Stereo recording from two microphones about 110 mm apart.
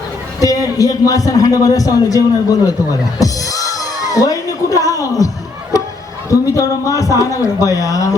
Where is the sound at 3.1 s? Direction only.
30° left (ahead or behind).